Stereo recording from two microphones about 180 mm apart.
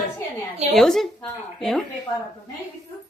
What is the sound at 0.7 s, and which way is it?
Speech, centre (ahead or behind).